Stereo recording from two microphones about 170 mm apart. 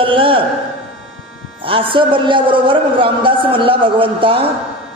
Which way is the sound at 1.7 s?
30° right (ahead or behind).